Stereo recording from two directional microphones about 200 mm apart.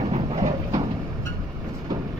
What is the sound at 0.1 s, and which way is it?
Vehicle, 30° right (ahead or behind).